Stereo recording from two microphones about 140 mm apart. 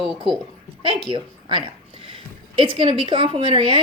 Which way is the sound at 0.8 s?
35° right (ahead or behind).